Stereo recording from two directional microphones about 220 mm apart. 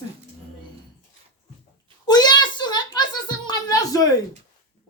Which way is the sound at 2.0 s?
20° left (ahead or behind).